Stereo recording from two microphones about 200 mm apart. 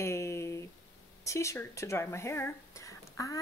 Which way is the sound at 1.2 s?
15° left (ahead or behind).